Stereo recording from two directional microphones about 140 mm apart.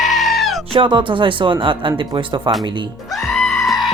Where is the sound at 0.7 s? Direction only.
40° right (ahead or behind).